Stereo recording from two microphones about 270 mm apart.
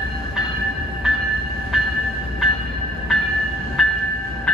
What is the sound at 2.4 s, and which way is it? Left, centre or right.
Train, centre.